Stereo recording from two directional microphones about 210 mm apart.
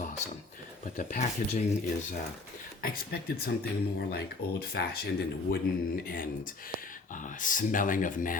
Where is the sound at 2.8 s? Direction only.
45° left (ahead or behind).